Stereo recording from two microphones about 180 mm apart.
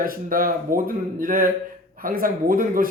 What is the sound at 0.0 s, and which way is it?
A man's voice, 50° right (ahead or behind).